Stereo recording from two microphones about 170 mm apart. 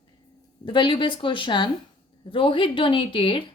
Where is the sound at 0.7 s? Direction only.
30° left (ahead or behind).